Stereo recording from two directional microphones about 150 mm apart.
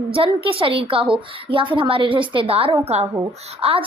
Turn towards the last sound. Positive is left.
turn(degrees=-40)  # may be behind; listen again after turning